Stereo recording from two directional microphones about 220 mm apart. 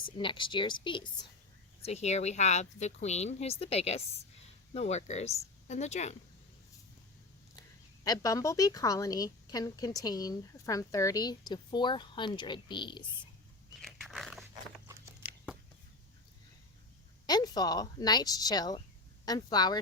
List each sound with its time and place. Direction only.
0.0 s speech: 20° left (ahead or behind)
8.0 s a woman's voice: 15° left (ahead or behind)
13.8 s dog: centre (ahead or behind)
14.5 s a sound: 15° right (ahead or behind)
17.2 s a woman's voice: 20° left (ahead or behind)